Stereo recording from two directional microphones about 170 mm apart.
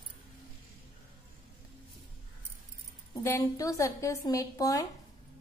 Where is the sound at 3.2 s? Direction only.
15° left (ahead or behind).